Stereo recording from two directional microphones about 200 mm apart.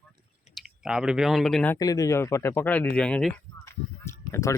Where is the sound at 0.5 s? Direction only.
5° right (ahead or behind).